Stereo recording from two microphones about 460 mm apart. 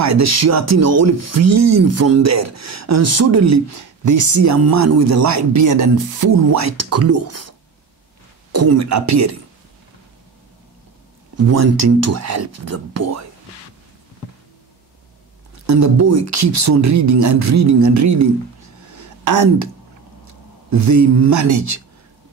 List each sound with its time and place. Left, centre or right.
0.0 s speech: right
11.5 s speech: right
15.5 s speech: right
18.9 s a sound: right
20.7 s speech: right